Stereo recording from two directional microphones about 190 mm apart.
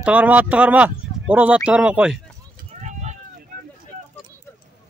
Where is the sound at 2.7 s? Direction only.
40° right (ahead or behind).